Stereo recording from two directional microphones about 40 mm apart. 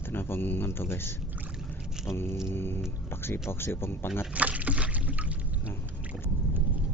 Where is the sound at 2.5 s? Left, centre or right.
Left.